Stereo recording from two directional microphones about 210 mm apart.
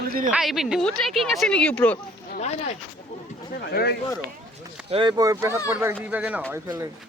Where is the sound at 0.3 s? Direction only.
Centre (ahead or behind).